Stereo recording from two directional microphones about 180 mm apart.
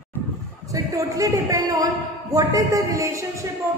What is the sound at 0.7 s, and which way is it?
A woman's voice, 20° right (ahead or behind).